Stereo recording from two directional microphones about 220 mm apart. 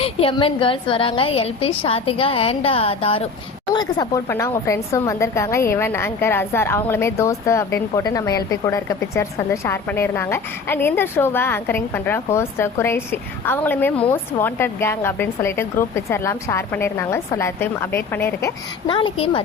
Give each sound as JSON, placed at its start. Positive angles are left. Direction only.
{"t": 0.0, "sound": "a woman's voice", "side_deg": 25}
{"t": 18.9, "sound": "a woman's voice", "side_deg": 20}